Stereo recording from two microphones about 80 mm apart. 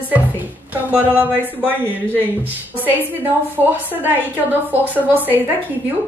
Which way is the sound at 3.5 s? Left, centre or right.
Right.